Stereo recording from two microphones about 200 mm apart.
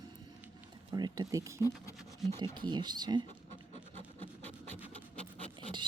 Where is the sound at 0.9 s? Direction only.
20° right (ahead or behind).